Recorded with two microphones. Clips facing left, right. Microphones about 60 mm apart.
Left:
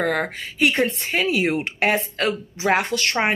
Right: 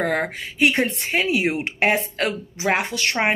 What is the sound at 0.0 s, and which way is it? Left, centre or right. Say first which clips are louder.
Speech: even; right.